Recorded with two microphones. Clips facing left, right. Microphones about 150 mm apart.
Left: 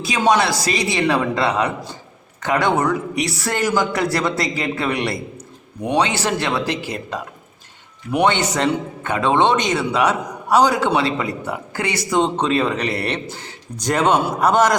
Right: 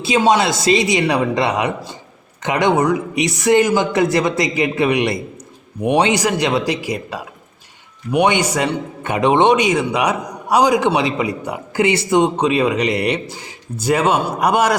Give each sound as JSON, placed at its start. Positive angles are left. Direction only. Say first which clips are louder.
{"t": 0.2, "sound": "a man's voice", "louder": "right 1 dB", "side_deg": -20}